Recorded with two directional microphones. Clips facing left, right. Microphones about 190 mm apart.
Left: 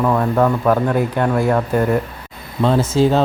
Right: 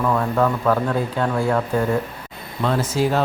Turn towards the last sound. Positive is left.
turn(degrees=25)  # may be behind; listen again after turning